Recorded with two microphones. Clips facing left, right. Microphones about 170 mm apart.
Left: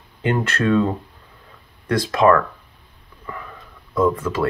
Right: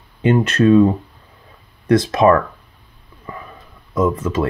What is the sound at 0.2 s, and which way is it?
Speech, 20° right (ahead or behind).